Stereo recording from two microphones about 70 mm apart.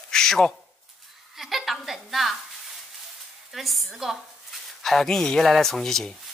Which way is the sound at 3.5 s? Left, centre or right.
Centre.